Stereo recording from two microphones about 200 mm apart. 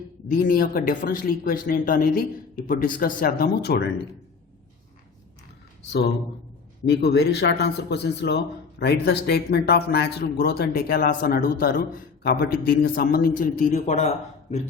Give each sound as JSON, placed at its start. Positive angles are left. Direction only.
{"t": 0.3, "sound": "speech", "side_deg": 45}
{"t": 6.8, "sound": "speech", "side_deg": 55}